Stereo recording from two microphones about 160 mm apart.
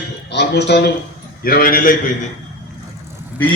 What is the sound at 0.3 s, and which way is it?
Speech, 90° left.